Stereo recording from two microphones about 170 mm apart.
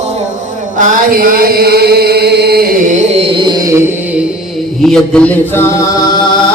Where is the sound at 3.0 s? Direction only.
35° right (ahead or behind).